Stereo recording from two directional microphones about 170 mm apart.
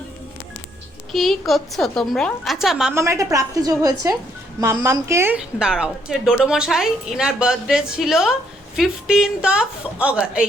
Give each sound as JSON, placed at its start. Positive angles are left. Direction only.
{"t": 1.1, "sound": "a woman's voice", "side_deg": 0}
{"t": 2.9, "sound": "a woman's voice", "side_deg": -15}